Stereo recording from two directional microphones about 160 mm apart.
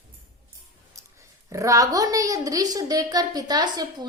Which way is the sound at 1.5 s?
20° right (ahead or behind).